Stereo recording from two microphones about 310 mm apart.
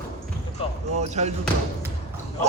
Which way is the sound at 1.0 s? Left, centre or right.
Right.